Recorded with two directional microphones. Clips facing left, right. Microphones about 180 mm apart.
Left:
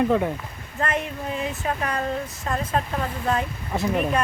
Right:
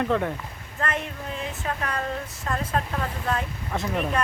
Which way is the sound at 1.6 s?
15° left (ahead or behind).